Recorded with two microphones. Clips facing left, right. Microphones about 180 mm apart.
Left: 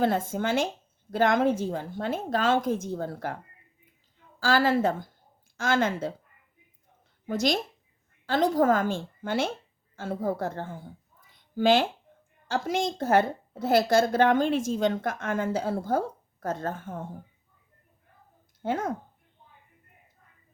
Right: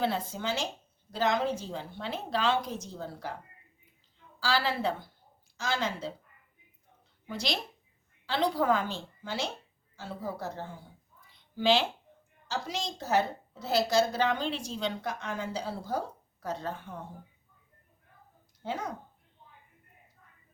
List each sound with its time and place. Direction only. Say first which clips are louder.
0.0 s a woman's voice: left 6 dB; 50° left (ahead or behind)
4.4 s a woman's voice: left 7 dB; 50° left (ahead or behind)
7.3 s a woman's voice: left 8 dB; 45° left (ahead or behind)
18.6 s a woman's voice: left 7 dB; 50° left (ahead or behind)